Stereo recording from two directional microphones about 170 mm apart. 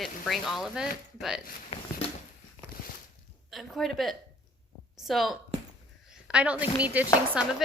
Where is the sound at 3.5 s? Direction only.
Centre (ahead or behind).